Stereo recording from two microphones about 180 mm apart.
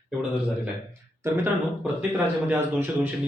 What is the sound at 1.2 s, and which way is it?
A man's voice, 15° right (ahead or behind).